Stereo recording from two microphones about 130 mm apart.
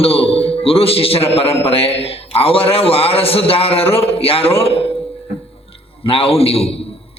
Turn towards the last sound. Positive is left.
turn(degrees=50)  # may be behind; listen again after turning